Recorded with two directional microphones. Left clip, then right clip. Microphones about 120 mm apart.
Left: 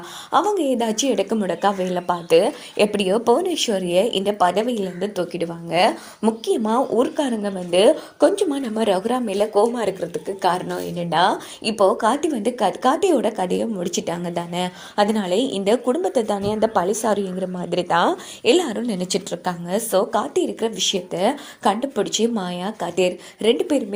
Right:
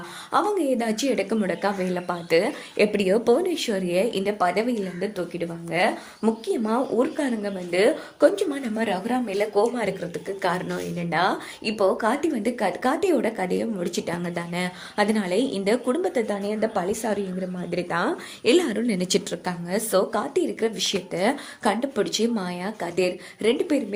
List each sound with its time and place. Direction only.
0.3 s speech: 35° left (ahead or behind)
5.1 s speech: 65° left (ahead or behind)
6.2 s speech: 40° left (ahead or behind)
6.7 s speech: 25° left (ahead or behind)
7.7 s speech: 40° left (ahead or behind)
8.7 s speech: 55° left (ahead or behind)
9.7 s speech: 25° left (ahead or behind)
17.8 s a woman's voice: 25° left (ahead or behind)